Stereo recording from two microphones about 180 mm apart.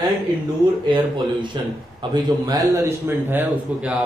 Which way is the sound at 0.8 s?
25° right (ahead or behind).